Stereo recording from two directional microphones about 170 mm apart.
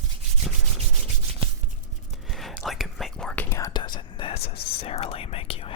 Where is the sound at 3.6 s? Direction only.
25° left (ahead or behind).